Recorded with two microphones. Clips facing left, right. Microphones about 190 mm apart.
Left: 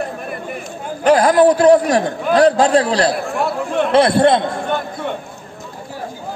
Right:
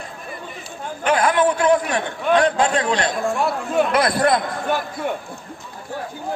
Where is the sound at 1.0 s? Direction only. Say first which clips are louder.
Left 7 dB; 35° left (ahead or behind).